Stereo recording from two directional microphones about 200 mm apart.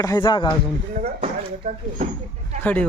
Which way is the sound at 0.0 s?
20° left (ahead or behind).